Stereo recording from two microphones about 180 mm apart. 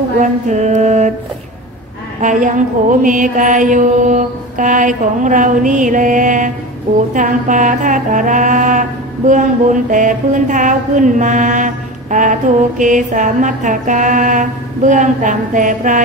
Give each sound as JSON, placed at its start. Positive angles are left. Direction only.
{"t": 0.2, "sound": "mantra", "side_deg": -40}
{"t": 2.2, "sound": "music", "side_deg": -45}